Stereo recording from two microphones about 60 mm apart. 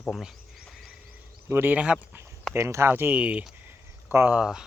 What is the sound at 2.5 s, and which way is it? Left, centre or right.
Speech, right.